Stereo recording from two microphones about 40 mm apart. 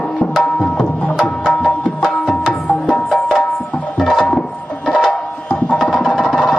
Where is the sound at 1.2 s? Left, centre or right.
Centre.